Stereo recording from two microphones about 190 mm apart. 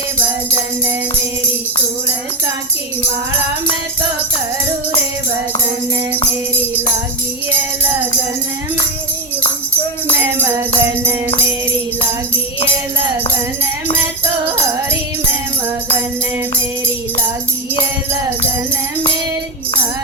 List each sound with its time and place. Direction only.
10.2 s music: 10° right (ahead or behind)
14.4 s music: 10° right (ahead or behind)